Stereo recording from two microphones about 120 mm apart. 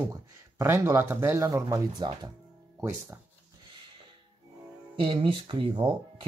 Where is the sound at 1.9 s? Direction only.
40° right (ahead or behind).